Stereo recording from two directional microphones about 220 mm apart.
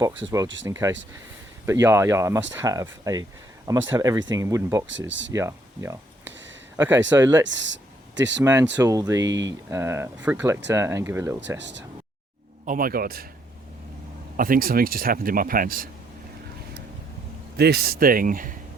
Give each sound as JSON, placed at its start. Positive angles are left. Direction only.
{"t": 0.6, "sound": "speech", "side_deg": -15}
{"t": 4.9, "sound": "speech", "side_deg": -55}
{"t": 5.3, "sound": "speech", "side_deg": -15}
{"t": 6.2, "sound": "a sound", "side_deg": -55}
{"t": 6.7, "sound": "speech", "side_deg": -10}
{"t": 7.4, "sound": "speech", "side_deg": -55}
{"t": 8.7, "sound": "speech", "side_deg": -15}
{"t": 11.3, "sound": "speech", "side_deg": -55}
{"t": 12.6, "sound": "speech", "side_deg": -40}
{"t": 14.3, "sound": "speech", "side_deg": -40}
{"t": 17.6, "sound": "speech", "side_deg": -45}